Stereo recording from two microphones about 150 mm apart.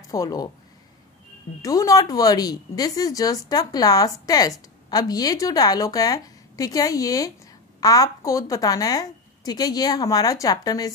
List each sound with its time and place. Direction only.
0.1 s speech: 25° left (ahead or behind)
1.6 s speech: 25° left (ahead or behind)